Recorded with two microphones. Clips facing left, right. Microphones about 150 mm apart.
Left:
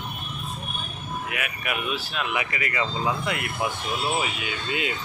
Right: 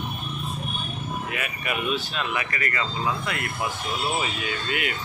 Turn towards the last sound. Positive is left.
turn(degrees=20)  # may be behind; listen again after turning